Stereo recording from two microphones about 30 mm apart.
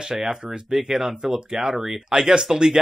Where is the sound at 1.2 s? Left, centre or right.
Right.